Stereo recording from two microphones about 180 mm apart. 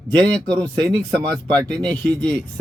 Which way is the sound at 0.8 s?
Centre (ahead or behind).